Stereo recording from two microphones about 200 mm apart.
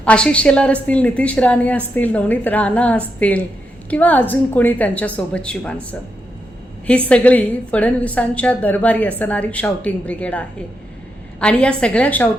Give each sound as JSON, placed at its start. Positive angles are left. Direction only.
{"t": 0.0, "sound": "a woman's voice", "side_deg": 5}
{"t": 7.1, "sound": "a woman's voice", "side_deg": 5}